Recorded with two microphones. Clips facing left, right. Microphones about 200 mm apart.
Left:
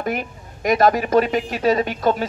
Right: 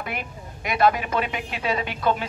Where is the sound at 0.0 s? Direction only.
45° left (ahead or behind).